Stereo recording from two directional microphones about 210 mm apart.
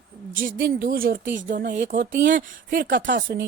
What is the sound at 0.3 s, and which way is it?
A woman's voice, 40° right (ahead or behind).